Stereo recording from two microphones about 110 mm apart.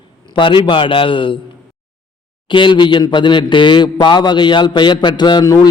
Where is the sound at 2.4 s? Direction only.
45° left (ahead or behind).